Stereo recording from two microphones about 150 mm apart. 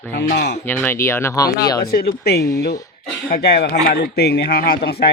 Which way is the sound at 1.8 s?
90° left.